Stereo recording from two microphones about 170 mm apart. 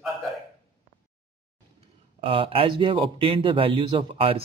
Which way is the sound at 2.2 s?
30° right (ahead or behind).